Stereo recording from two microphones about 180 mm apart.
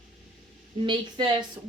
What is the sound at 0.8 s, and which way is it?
Speech, 25° right (ahead or behind).